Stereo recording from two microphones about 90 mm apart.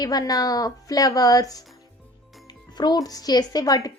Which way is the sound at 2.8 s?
50° left (ahead or behind).